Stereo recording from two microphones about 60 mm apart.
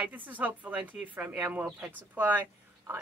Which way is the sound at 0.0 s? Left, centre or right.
Right.